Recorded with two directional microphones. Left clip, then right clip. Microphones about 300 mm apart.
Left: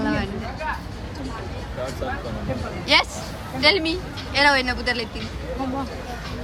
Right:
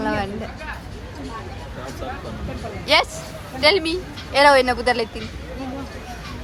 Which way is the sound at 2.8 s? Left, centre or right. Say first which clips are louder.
Right 1 dB; centre.